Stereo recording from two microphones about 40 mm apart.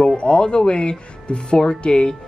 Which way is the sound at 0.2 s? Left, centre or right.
Left.